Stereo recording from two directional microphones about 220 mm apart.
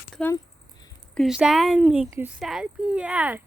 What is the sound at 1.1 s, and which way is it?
Speech, centre (ahead or behind).